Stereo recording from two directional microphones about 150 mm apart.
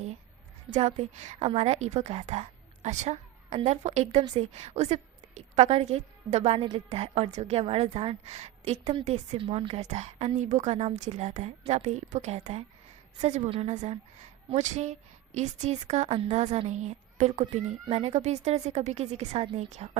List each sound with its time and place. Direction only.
0.7 s a woman's voice: 50° right (ahead or behind)